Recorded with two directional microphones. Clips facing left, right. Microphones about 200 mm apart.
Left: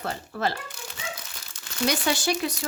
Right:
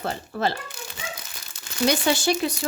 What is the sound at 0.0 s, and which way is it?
Speech, 25° right (ahead or behind).